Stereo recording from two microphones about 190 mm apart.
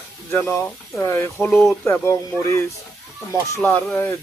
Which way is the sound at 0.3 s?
10° left (ahead or behind).